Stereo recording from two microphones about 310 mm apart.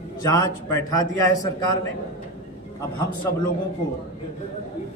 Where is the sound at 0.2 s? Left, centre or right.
Centre.